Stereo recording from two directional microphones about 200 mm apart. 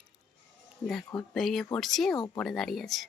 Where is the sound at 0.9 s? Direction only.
Centre (ahead or behind).